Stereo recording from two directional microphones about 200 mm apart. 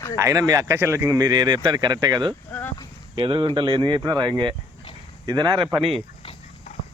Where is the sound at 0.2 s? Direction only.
15° right (ahead or behind).